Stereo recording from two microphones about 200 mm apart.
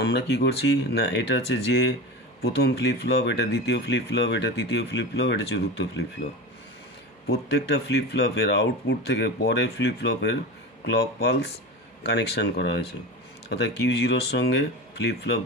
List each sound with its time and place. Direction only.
0.0 s speech: 55° left (ahead or behind)
7.4 s speech: 60° left (ahead or behind)